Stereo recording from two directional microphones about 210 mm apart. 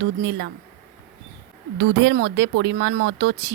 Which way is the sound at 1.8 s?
60° right (ahead or behind).